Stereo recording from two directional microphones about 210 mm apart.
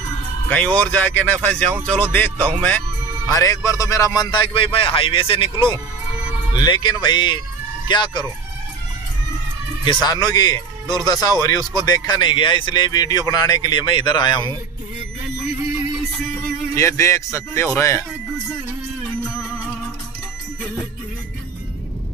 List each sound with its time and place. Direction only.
0.5 s a man's voice: 5° left (ahead or behind); by 8.3 s 20° left (ahead or behind)
10.0 s a man's voice: 20° left (ahead or behind)
16.7 s a man's voice: 15° left (ahead or behind)